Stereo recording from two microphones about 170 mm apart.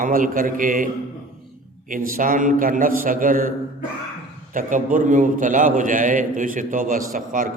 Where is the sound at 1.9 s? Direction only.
55° right (ahead or behind).